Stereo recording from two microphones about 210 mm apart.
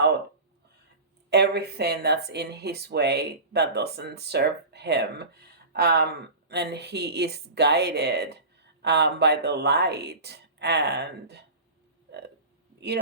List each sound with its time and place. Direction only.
1.3 s speech: 50° right (ahead or behind)